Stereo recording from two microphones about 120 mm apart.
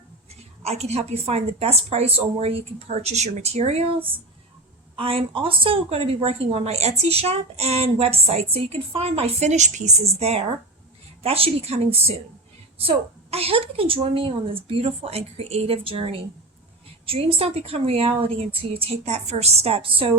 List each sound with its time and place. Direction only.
0.6 s a woman's voice: 65° right (ahead or behind)
4.9 s a woman's voice: 50° right (ahead or behind)